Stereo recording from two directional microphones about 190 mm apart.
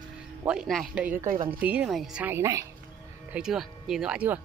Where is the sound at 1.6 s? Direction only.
5° right (ahead or behind).